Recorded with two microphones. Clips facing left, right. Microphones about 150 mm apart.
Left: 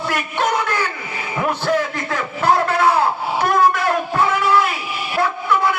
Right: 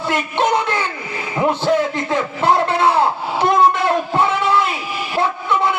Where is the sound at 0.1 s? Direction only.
25° right (ahead or behind).